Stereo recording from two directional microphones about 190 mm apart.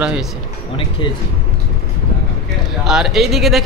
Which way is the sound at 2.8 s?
Centre (ahead or behind).